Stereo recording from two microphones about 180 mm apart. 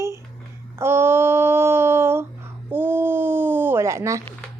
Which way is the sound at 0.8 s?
15° right (ahead or behind).